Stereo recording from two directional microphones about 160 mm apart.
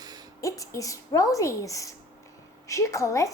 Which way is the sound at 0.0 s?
25° right (ahead or behind).